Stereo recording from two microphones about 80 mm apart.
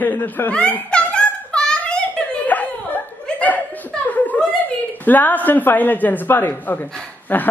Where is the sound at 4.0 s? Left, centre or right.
Left.